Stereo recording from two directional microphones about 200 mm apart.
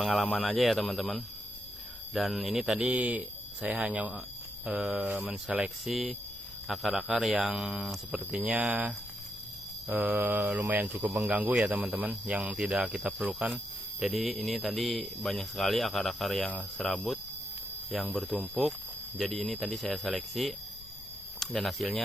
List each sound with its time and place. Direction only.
0.0 s speech: centre (ahead or behind)
9.9 s speech: 5° right (ahead or behind)